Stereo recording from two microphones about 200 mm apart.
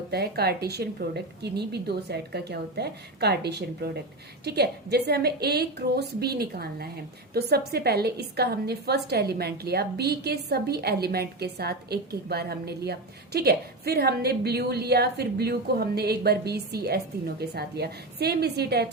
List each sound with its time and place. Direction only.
0.1 s a woman's voice: 55° right (ahead or behind)